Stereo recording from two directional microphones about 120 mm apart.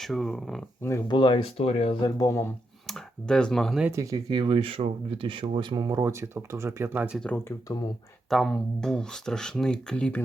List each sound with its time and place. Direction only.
0.0 s speech: centre (ahead or behind)
0.8 s speech: 25° left (ahead or behind)
1.0 s speech: 40° left (ahead or behind)
2.0 s speech: 30° left (ahead or behind)
2.8 s speech: 5° left (ahead or behind)
3.9 s speech: 30° right (ahead or behind)
8.3 s speech: centre (ahead or behind)